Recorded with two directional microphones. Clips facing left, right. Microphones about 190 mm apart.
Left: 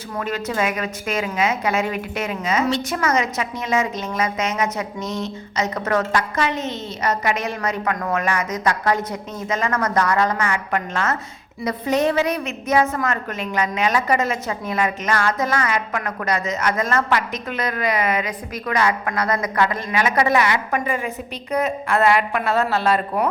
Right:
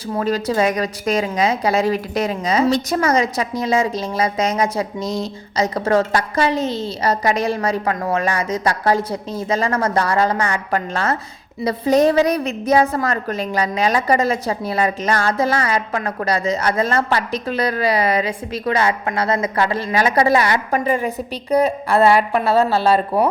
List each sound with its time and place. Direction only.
0.1 s a woman's voice: 35° right (ahead or behind)